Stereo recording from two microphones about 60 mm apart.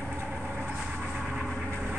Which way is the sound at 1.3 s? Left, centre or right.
Centre.